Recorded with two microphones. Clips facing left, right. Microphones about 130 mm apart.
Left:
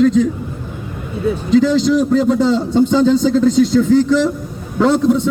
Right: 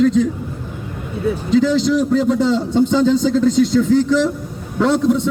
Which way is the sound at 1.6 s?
75° left (ahead or behind).